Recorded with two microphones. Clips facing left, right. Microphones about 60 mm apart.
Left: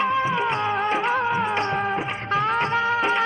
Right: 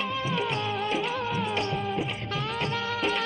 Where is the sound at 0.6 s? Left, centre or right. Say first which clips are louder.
Left 6 dB; left.